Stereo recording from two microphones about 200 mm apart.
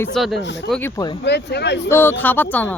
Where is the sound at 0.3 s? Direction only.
60° left (ahead or behind).